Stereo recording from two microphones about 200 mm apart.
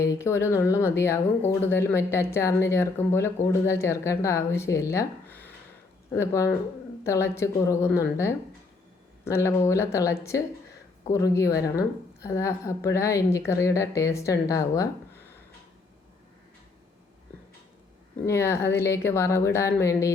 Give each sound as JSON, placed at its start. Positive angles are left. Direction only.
{"t": 0.0, "sound": "speech", "side_deg": 15}
{"t": 18.3, "sound": "speech", "side_deg": 15}